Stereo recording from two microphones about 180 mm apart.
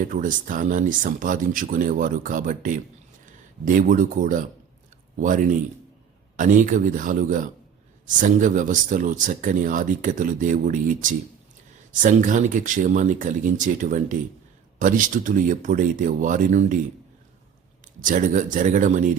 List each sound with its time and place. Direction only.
0.1 s speech: 45° right (ahead or behind)
18.0 s speech: 45° right (ahead or behind)